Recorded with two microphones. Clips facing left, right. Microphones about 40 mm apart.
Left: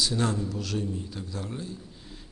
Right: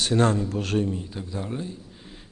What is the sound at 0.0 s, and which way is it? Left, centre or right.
Speech, right.